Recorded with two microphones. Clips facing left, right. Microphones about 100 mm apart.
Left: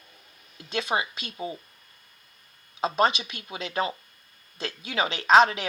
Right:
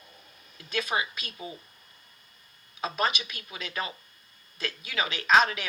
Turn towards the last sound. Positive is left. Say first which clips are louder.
# left 4 dB
turn(degrees=30)  # may be behind; listen again after turning